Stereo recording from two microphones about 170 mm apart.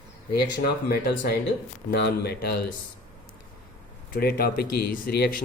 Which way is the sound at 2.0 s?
80° left.